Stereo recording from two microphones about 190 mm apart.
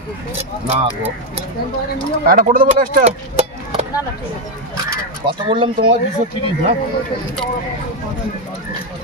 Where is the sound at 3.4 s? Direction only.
30° right (ahead or behind).